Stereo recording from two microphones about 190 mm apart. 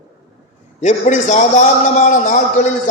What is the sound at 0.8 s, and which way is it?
A man's voice, 40° left (ahead or behind).